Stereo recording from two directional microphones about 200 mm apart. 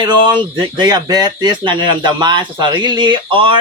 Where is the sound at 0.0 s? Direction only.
25° right (ahead or behind).